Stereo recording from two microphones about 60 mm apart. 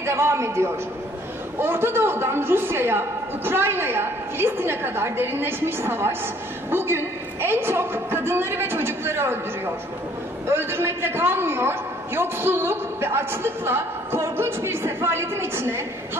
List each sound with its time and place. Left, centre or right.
0.0 s a man's voice: right
1.6 s a man's voice: right